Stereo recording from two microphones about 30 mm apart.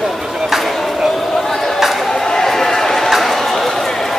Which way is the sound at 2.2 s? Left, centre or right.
Centre.